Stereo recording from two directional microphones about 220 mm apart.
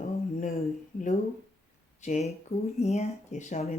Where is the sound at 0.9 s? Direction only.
40° left (ahead or behind).